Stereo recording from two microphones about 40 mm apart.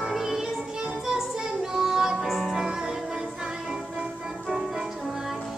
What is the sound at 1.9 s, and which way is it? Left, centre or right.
Music, centre.